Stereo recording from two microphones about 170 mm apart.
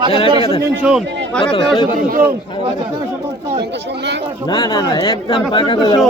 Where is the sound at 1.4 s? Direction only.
30° left (ahead or behind).